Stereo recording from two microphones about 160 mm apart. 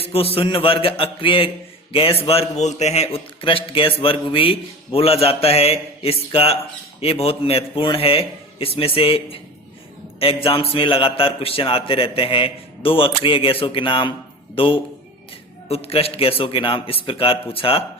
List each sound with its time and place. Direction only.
0.0 s a man's voice: 35° left (ahead or behind)